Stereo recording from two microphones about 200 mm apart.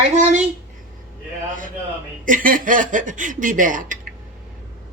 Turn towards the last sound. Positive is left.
turn(degrees=-40)  # may be behind; listen again after turning